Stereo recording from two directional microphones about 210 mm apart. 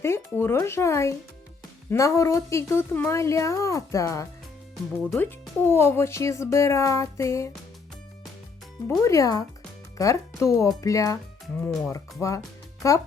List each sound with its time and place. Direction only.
0.0 s speech: 10° left (ahead or behind)
8.9 s speech: 15° left (ahead or behind)